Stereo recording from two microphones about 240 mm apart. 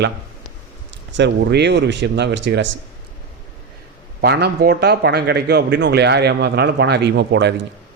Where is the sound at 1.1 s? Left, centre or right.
Right.